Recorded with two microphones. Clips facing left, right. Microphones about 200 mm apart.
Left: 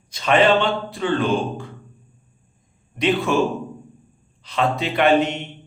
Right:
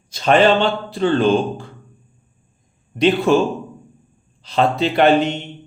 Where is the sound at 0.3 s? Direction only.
35° right (ahead or behind).